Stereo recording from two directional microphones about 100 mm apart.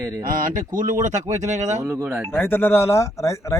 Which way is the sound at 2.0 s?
15° right (ahead or behind).